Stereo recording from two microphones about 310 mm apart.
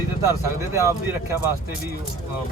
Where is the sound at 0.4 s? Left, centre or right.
Centre.